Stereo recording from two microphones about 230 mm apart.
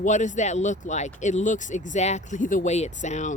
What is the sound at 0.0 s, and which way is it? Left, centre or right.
Speech, left.